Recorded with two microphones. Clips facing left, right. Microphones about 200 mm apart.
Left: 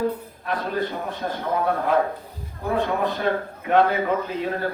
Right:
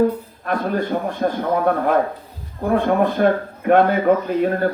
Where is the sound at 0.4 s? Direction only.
50° right (ahead or behind).